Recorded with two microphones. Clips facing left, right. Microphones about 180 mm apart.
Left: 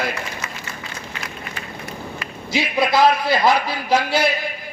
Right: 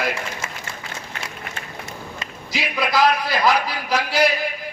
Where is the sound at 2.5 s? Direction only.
25° left (ahead or behind).